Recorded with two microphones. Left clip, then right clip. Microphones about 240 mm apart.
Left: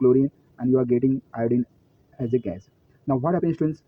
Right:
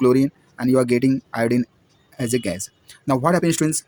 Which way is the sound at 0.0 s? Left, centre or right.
Right.